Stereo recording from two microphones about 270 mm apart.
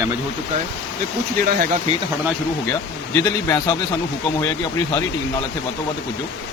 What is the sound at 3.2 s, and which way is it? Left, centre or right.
Speech, centre.